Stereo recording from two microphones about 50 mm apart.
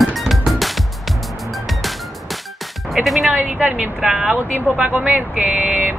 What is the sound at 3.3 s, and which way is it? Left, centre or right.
A woman's voice, right.